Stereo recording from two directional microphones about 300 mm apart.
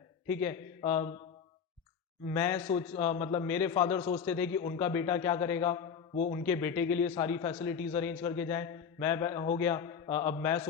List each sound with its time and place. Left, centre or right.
0.3 s speech: centre
2.3 s speech: centre
6.1 s a man's voice: left
6.4 s speech: centre